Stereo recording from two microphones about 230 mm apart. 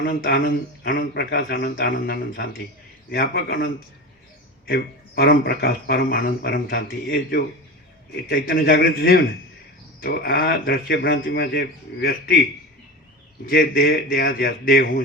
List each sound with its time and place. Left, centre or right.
0.0 s speech: left